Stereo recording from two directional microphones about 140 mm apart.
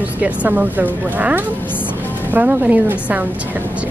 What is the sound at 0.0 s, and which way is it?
Speech, 10° right (ahead or behind).